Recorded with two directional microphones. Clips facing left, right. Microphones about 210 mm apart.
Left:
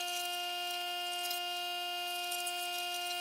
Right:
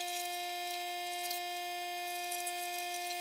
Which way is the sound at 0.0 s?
5° right (ahead or behind).